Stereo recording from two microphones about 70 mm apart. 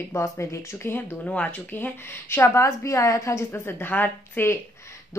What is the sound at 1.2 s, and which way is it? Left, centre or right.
Speech, centre.